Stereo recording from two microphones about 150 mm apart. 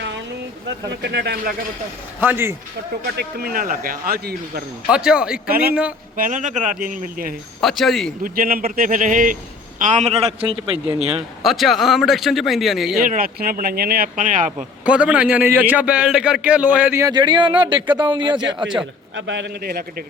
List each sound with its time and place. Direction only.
1.2 s a man's voice: 90° right
2.2 s a man's voice: 15° right (ahead or behind)
3.2 s speech: 90° right
4.9 s speech: 5° right (ahead or behind)
6.1 s a man's voice: 60° right (ahead or behind)
7.6 s speech: centre (ahead or behind)
8.2 s a man's voice: 75° right (ahead or behind); by 10.8 s 35° right (ahead or behind)
11.4 s speech: centre (ahead or behind)
13.0 s speech: 70° right (ahead or behind)
14.8 s a man's voice: 5° right (ahead or behind)
17.1 s a man's voice: 30° right (ahead or behind)
19.6 s a man's voice: 90° right